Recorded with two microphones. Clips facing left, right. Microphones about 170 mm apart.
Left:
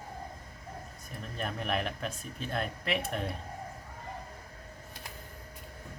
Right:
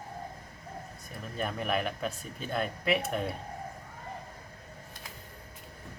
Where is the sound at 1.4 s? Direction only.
Centre (ahead or behind).